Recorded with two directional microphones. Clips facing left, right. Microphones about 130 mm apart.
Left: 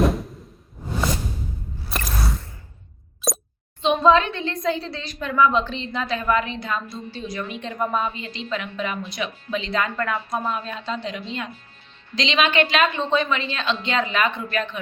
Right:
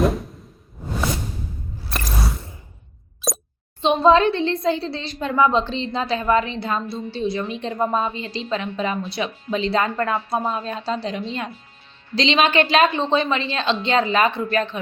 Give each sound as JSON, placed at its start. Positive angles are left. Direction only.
{"t": 0.0, "sound": "whoosh", "side_deg": 0}
{"t": 1.9, "sound": "a sound", "side_deg": 0}
{"t": 3.2, "sound": "plop", "side_deg": 0}
{"t": 3.8, "sound": "a woman's voice", "side_deg": -30}